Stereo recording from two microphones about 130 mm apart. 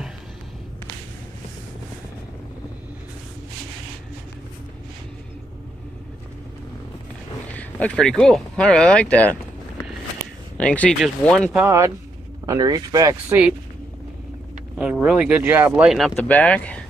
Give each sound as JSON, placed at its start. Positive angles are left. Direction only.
{"t": 7.5, "sound": "speech", "side_deg": 10}
{"t": 10.6, "sound": "speech", "side_deg": 10}
{"t": 11.5, "sound": "speech", "side_deg": -20}
{"t": 13.3, "sound": "speech", "side_deg": -10}
{"t": 14.8, "sound": "speech", "side_deg": -10}
{"t": 16.2, "sound": "speech", "side_deg": 10}